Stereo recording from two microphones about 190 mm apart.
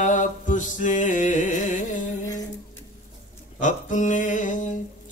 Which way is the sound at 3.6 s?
40° left (ahead or behind).